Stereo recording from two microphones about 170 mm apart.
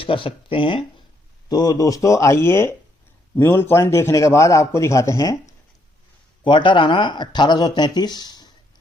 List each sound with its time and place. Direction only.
0.0 s a man's voice: 30° left (ahead or behind)
6.4 s speech: 30° left (ahead or behind)